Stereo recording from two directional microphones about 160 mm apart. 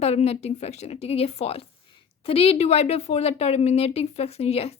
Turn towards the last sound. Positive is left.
turn(degrees=40)  # may be behind; listen again after turning